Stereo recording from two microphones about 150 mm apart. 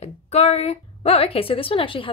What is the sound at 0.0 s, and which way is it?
A woman's voice, 45° left (ahead or behind).